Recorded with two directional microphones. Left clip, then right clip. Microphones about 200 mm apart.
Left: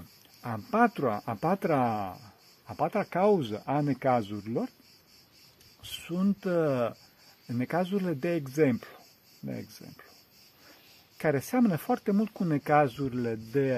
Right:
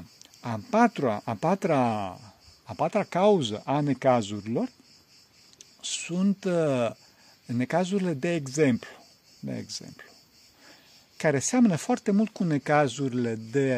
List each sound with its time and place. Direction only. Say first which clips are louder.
0.4 s speech: right 3 dB; 35° right (ahead or behind)
5.8 s speech: right 4 dB; 30° right (ahead or behind)
11.1 s speech: right 3 dB; 35° right (ahead or behind)